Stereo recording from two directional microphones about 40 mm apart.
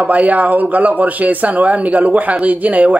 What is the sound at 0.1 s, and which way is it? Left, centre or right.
Speech, right.